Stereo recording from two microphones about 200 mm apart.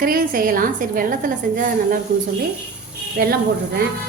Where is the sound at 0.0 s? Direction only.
45° right (ahead or behind).